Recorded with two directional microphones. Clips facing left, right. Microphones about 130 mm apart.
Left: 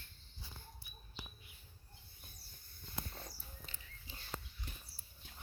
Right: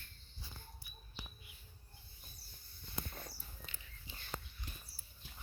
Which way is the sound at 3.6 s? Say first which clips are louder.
Right 1 dB; 35° left (ahead or behind).